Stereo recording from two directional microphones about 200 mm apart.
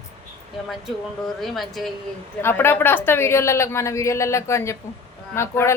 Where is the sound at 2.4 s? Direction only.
10° left (ahead or behind).